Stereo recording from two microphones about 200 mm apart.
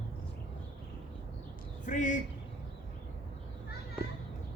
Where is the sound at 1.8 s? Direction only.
40° left (ahead or behind).